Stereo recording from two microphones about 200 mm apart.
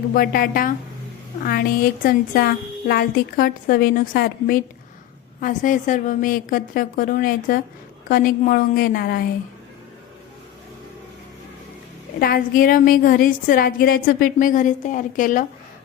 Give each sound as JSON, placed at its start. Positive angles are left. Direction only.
{"t": 0.1, "sound": "a woman's voice", "side_deg": 45}
{"t": 2.0, "sound": "a woman's voice", "side_deg": 50}
{"t": 12.2, "sound": "a woman's voice", "side_deg": 45}